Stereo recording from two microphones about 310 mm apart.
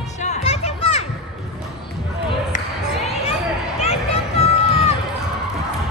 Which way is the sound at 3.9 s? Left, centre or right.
Centre.